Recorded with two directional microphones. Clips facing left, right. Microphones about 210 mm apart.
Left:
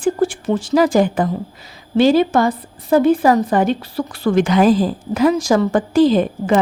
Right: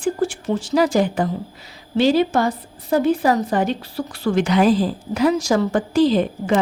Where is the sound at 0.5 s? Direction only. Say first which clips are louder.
Left 3 dB; 90° left.